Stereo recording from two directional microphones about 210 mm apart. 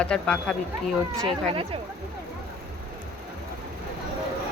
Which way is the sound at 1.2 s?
25° right (ahead or behind).